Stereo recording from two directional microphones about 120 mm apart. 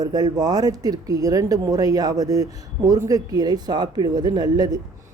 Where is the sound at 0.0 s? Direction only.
35° right (ahead or behind).